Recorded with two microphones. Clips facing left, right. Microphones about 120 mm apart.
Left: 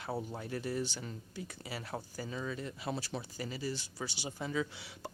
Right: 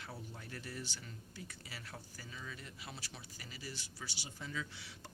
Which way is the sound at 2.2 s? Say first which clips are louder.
Left 10 dB; 45° left (ahead or behind).